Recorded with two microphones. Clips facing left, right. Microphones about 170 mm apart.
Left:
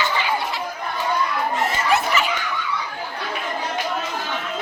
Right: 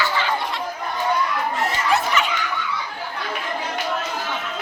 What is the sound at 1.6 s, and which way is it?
Snicker, centre (ahead or behind).